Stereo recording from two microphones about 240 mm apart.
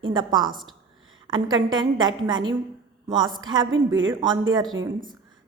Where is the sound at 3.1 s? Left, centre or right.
Centre.